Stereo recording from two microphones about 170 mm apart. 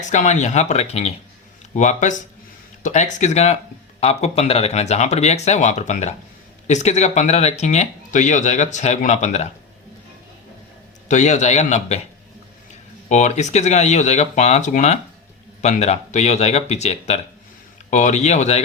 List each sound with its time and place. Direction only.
0.0 s speech: 45° left (ahead or behind)
11.1 s speech: 45° left (ahead or behind)
13.1 s speech: 45° left (ahead or behind)